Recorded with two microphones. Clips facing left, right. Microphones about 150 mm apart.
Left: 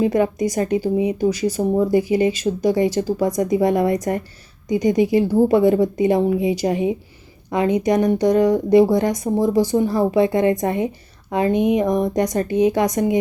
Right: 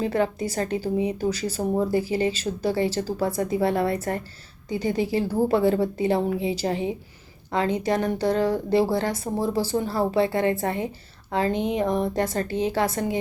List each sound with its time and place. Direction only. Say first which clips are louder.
0.0 s speech: left 6 dB; 15° left (ahead or behind)